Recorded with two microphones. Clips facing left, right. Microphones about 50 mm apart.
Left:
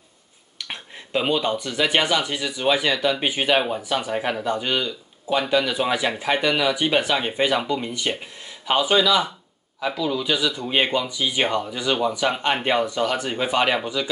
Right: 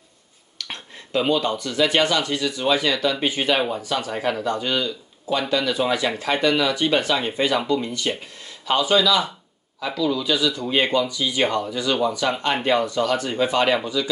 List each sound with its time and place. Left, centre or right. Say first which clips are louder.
0.6 s speech: even; centre